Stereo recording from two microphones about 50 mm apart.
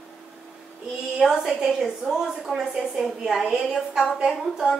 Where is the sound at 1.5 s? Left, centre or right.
Centre.